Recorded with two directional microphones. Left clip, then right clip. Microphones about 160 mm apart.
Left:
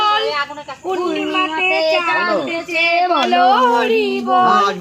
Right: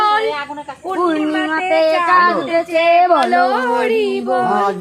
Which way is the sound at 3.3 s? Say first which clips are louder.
Left 2 dB; 5° left (ahead or behind).